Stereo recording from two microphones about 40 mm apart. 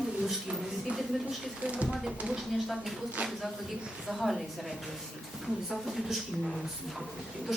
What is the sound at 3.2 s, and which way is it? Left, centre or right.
Speech, right.